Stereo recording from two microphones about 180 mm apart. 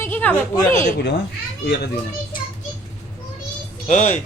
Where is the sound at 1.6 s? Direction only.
65° left (ahead or behind).